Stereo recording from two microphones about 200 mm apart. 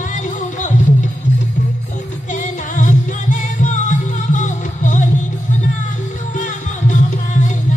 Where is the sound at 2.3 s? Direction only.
40° left (ahead or behind).